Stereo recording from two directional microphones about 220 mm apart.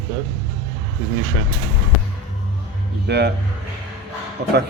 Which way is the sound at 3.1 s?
50° right (ahead or behind).